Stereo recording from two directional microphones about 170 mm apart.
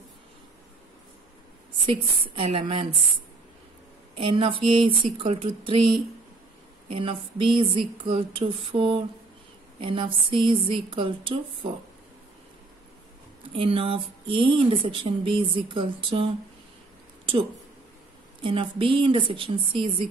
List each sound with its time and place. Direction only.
1.9 s speech: 30° right (ahead or behind)
4.2 s speech: 30° right (ahead or behind)
6.9 s a woman's voice: 30° right (ahead or behind)
13.6 s speech: 30° right (ahead or behind)
18.4 s speech: 30° right (ahead or behind)